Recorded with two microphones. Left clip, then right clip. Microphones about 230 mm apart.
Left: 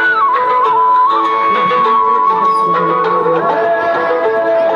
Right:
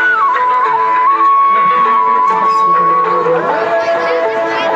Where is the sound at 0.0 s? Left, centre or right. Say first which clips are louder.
Even; left.